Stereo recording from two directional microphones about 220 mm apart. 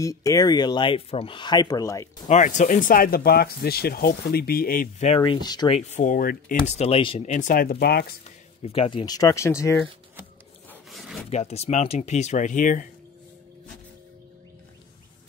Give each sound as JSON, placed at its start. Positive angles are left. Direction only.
{"t": 0.0, "sound": "speech", "side_deg": 15}
{"t": 2.2, "sound": "speech", "side_deg": 35}
{"t": 5.8, "sound": "speech", "side_deg": 30}
{"t": 6.7, "sound": "speech", "side_deg": 25}
{"t": 8.6, "sound": "speech", "side_deg": 25}
{"t": 10.7, "sound": "zipper", "side_deg": 0}
{"t": 11.2, "sound": "speech", "side_deg": 30}